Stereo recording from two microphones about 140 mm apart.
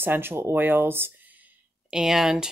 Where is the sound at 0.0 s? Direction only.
15° right (ahead or behind).